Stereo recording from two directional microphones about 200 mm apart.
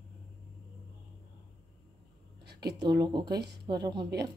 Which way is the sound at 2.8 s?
20° right (ahead or behind).